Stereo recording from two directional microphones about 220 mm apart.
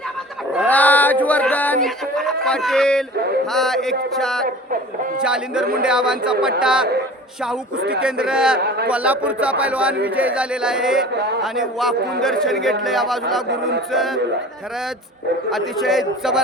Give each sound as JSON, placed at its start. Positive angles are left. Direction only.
{"t": 0.7, "sound": "a sound", "side_deg": 5}
{"t": 3.5, "sound": "a man's voice", "side_deg": 0}
{"t": 8.0, "sound": "a man's voice", "side_deg": -5}
{"t": 13.5, "sound": "speech", "side_deg": -50}
{"t": 13.9, "sound": "a man's voice", "side_deg": 0}
{"t": 15.4, "sound": "a man's voice", "side_deg": 0}